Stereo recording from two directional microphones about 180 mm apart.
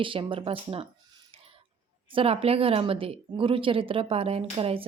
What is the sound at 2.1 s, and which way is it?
A woman's voice, 30° right (ahead or behind).